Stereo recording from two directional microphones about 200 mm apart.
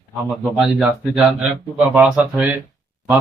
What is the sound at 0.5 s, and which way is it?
Speech, 5° right (ahead or behind).